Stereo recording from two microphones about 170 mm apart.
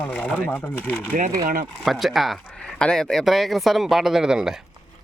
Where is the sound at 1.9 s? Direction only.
Centre (ahead or behind).